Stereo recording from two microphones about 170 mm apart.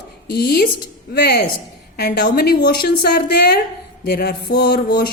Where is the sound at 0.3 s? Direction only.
65° left (ahead or behind).